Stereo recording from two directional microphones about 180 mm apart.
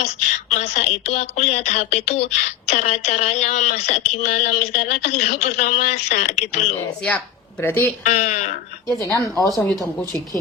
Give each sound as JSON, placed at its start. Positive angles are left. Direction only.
{"t": 0.5, "sound": "speech", "side_deg": 40}
{"t": 7.6, "sound": "speech", "side_deg": 10}
{"t": 8.0, "sound": "speech", "side_deg": 40}
{"t": 9.0, "sound": "speech", "side_deg": 15}
{"t": 9.3, "sound": "speech", "side_deg": 0}